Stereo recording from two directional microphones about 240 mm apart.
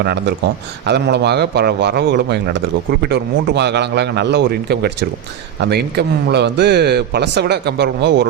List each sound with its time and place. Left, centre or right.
0.0 s a man's voice: right